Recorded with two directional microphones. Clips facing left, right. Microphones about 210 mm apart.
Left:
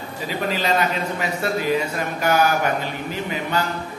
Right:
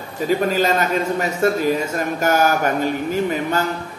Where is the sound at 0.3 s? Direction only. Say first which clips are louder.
Right 5 dB; 45° right (ahead or behind).